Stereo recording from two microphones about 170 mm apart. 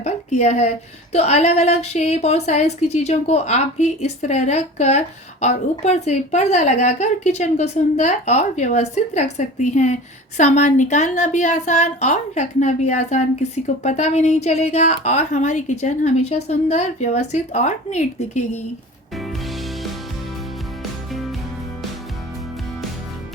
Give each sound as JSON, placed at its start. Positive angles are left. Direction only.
{"t": 0.0, "sound": "speech", "side_deg": 40}
{"t": 19.1, "sound": "music", "side_deg": 0}
{"t": 21.1, "sound": "music", "side_deg": 0}